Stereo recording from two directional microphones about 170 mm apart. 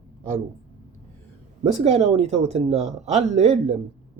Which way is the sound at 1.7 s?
40° right (ahead or behind).